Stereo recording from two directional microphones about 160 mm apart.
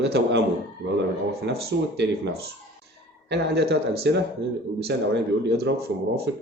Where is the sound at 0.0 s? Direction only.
90° right.